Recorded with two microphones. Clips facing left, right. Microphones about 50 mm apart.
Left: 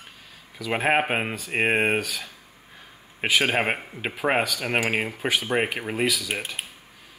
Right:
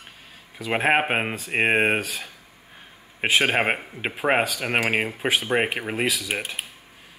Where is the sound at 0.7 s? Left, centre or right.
Centre.